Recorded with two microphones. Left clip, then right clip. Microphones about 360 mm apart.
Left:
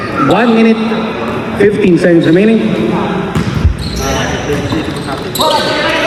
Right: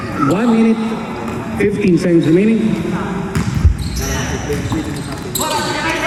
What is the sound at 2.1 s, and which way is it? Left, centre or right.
Speech, left.